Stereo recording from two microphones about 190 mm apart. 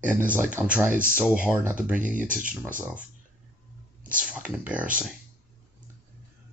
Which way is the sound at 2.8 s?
10° right (ahead or behind).